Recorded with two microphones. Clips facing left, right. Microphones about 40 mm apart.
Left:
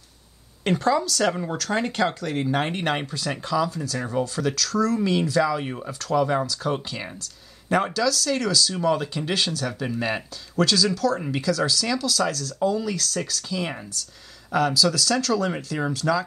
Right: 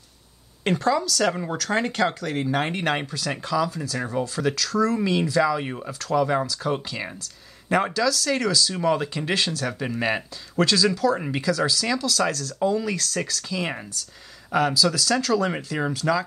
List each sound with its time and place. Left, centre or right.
0.7 s speech: centre
9.5 s speech: centre
12.5 s speech: centre
13.3 s speech: centre